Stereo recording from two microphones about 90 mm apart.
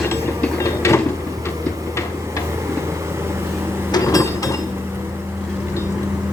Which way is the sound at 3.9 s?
40° left (ahead or behind).